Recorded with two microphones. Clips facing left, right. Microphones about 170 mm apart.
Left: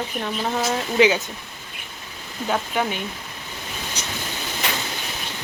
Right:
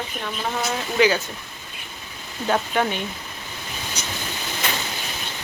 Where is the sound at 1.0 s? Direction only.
20° left (ahead or behind).